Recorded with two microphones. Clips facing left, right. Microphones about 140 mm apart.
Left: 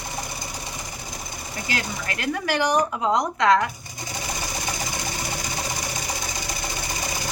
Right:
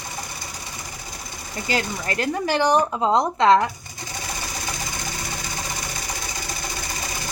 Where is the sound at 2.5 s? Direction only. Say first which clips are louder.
Right 2 dB; 30° right (ahead or behind).